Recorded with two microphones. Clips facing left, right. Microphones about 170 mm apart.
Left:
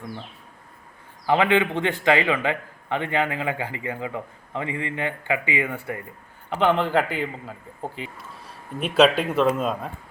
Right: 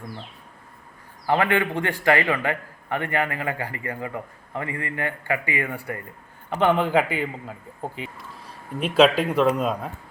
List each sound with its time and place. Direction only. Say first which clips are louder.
1.3 s a man's voice: left 2 dB; 20° left (ahead or behind)
6.5 s a man's voice: right 1 dB; 5° right (ahead or behind)